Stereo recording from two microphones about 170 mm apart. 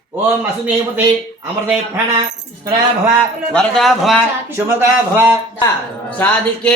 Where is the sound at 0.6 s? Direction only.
5° right (ahead or behind).